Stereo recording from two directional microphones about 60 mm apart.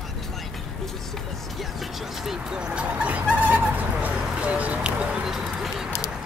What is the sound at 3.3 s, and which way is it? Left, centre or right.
Bird, right.